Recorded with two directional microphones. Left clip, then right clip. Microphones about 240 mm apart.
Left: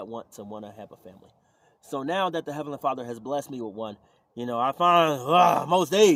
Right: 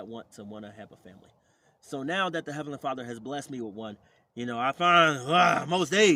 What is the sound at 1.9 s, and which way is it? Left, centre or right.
Speech, centre.